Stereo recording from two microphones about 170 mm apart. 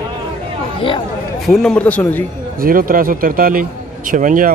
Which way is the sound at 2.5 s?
55° right (ahead or behind).